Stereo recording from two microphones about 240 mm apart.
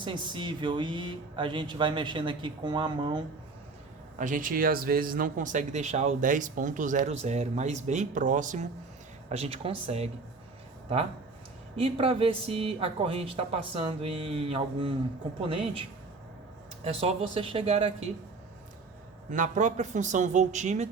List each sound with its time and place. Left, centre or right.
0.0 s speech: centre
4.2 s speech: right
11.8 s speech: right
19.3 s speech: right